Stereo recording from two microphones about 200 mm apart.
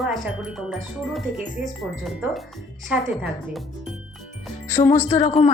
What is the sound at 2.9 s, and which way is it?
Speech, 5° right (ahead or behind).